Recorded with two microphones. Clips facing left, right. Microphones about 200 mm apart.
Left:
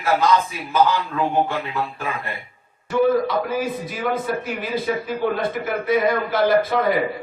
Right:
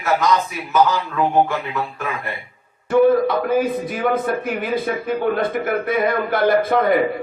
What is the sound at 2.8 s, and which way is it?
A man's voice, 55° right (ahead or behind).